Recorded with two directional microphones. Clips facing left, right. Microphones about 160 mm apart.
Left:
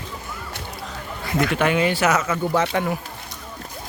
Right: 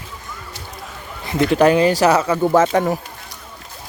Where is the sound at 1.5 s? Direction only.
35° right (ahead or behind).